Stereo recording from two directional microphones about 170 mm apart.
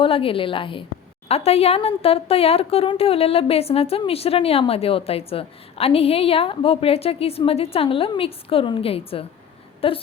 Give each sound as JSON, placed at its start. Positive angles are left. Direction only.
{"t": 0.0, "sound": "speech", "side_deg": 30}